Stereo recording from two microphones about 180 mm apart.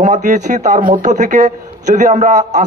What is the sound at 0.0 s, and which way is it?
A man's voice, 40° right (ahead or behind).